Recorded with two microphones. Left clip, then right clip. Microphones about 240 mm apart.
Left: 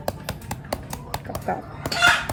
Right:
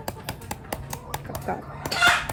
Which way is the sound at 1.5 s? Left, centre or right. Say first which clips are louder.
Left 3 dB; centre.